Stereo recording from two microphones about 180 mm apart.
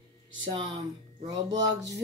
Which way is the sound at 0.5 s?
25° right (ahead or behind).